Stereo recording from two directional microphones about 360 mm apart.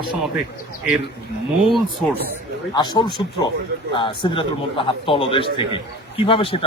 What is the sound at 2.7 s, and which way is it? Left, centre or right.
A man's voice, centre.